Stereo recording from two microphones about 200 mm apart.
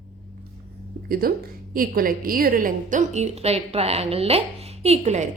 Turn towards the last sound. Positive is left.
turn(degrees=-35)  # may be behind; listen again after turning